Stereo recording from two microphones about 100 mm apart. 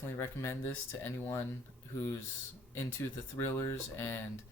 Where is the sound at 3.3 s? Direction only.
25° left (ahead or behind).